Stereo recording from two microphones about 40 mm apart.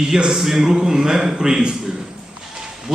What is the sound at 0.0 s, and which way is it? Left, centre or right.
Speech, centre.